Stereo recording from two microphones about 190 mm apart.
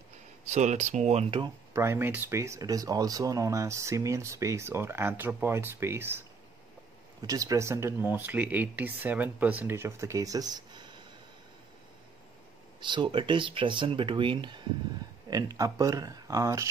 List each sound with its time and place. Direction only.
0.5 s speech: 35° right (ahead or behind)
1.7 s speech: 15° right (ahead or behind)
12.8 s speech: 25° right (ahead or behind)